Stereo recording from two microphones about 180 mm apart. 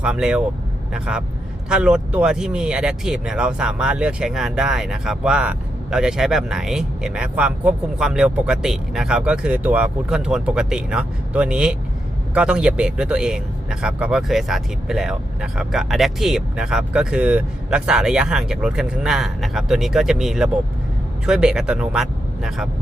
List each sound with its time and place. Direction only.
0.0 s speech: 5° right (ahead or behind)